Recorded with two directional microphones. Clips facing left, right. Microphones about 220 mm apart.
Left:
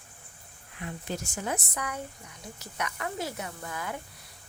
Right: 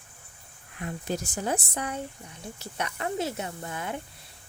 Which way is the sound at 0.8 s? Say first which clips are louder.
Right 4 dB; 40° right (ahead or behind).